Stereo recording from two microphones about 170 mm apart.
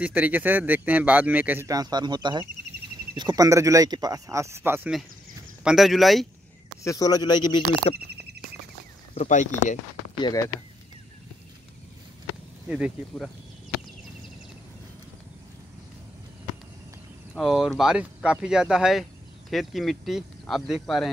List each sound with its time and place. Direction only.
0.0 s speech: 10° right (ahead or behind)
5.6 s speech: 5° right (ahead or behind)
6.8 s speech: 20° left (ahead or behind)
9.1 s speech: 45° left (ahead or behind)
10.1 s speech: 25° left (ahead or behind)
12.6 s speech: 5° right (ahead or behind)
17.3 s speech: centre (ahead or behind)